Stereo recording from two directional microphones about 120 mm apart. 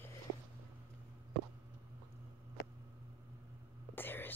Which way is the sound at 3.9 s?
15° left (ahead or behind).